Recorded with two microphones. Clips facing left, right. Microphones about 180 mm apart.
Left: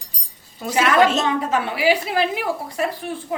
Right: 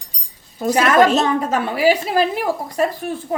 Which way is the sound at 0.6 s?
45° right (ahead or behind).